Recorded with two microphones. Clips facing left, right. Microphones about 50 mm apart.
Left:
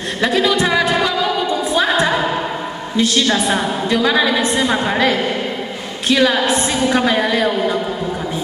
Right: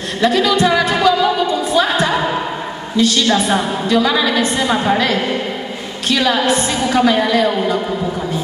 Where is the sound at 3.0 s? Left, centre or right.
Left.